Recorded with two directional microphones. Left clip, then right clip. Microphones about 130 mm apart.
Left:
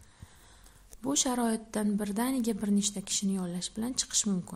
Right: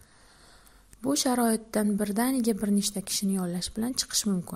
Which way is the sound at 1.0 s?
30° right (ahead or behind).